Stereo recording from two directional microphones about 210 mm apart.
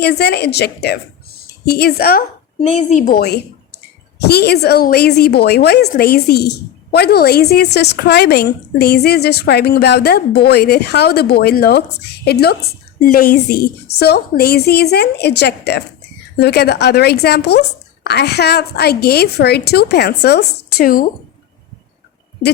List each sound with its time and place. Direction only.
0.0 s a woman's voice: 50° left (ahead or behind)